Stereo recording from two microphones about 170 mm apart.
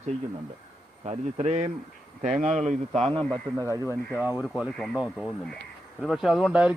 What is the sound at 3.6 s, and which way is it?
Speech, 20° right (ahead or behind).